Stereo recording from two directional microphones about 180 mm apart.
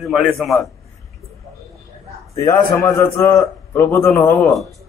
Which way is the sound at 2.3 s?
15° left (ahead or behind).